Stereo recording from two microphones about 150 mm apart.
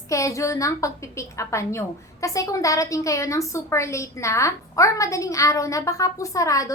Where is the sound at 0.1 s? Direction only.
20° left (ahead or behind).